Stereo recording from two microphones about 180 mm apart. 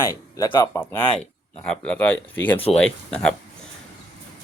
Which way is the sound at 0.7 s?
10° left (ahead or behind).